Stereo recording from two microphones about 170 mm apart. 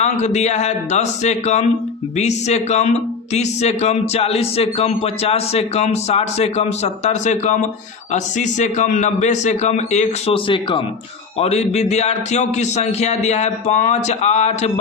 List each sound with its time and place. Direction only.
0.0 s a man's voice: 40° left (ahead or behind)